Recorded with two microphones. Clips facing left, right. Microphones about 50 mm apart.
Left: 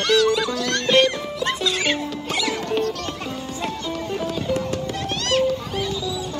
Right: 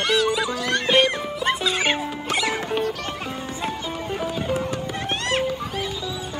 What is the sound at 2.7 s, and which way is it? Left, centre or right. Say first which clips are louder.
Music: left 2 dB; centre.